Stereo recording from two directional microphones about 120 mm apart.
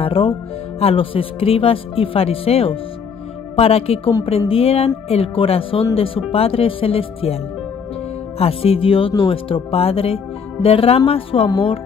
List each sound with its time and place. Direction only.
0.0 s a woman's voice: 50° left (ahead or behind)
8.4 s speech: 55° left (ahead or behind)